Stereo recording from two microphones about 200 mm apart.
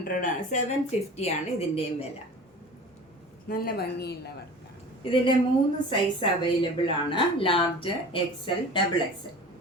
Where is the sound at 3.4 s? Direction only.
45° left (ahead or behind).